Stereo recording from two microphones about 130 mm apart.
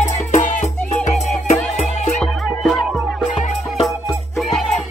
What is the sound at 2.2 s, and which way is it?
Music, centre (ahead or behind).